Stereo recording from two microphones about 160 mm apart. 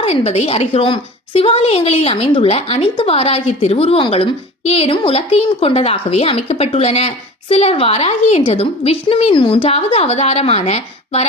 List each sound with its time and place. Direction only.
0.0 s a woman's voice: 40° left (ahead or behind)